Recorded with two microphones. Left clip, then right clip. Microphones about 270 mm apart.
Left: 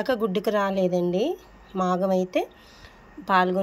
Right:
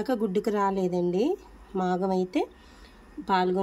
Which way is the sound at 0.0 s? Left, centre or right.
Centre.